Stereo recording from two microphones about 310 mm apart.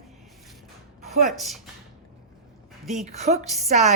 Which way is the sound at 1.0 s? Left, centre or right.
Centre.